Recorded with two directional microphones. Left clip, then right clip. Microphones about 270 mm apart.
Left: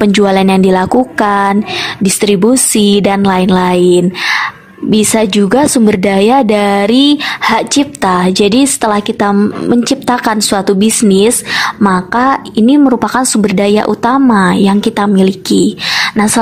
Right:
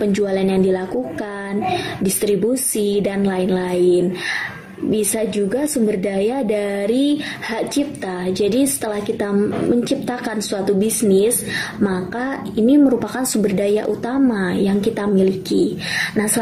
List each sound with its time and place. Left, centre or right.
0.0 s a woman's voice: left